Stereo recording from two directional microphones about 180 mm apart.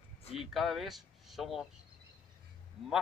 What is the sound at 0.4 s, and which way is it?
Speech, centre (ahead or behind).